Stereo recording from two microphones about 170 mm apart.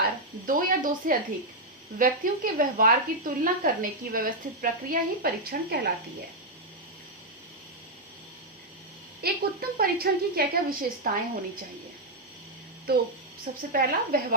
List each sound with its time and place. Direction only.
0.0 s speech: 55° right (ahead or behind)
9.2 s speech: 60° right (ahead or behind)
12.9 s speech: 65° right (ahead or behind)
13.6 s speech: 55° right (ahead or behind)